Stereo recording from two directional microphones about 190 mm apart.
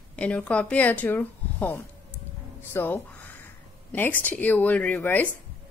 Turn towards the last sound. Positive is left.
turn(degrees=10)  # may be behind; listen again after turning